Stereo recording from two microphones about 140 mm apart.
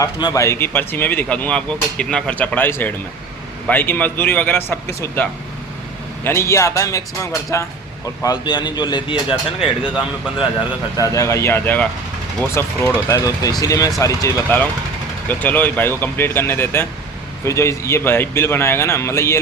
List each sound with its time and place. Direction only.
0.0 s speech: 25° left (ahead or behind)
8.4 s speech: 35° left (ahead or behind)
10.9 s speech: 25° left (ahead or behind)